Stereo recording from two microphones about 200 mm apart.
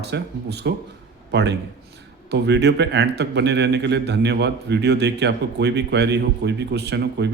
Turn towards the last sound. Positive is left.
turn(degrees=-60)  # may be behind; listen again after turning